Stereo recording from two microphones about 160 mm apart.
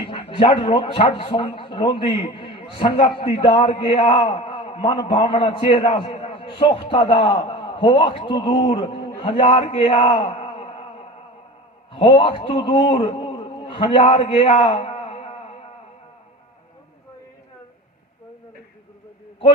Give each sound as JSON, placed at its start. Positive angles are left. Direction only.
{"t": 0.1, "sound": "speech", "side_deg": 35}
{"t": 11.9, "sound": "a man's voice", "side_deg": 35}